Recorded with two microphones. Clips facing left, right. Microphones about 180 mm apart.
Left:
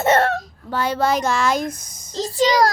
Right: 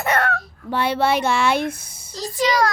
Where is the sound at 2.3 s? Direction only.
35° left (ahead or behind).